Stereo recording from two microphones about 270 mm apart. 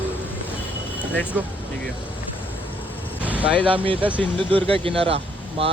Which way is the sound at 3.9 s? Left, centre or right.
Centre.